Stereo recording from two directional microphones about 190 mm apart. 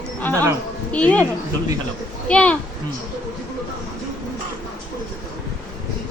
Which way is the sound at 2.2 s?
5° left (ahead or behind).